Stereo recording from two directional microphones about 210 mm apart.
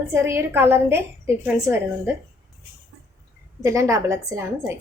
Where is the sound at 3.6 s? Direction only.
15° right (ahead or behind).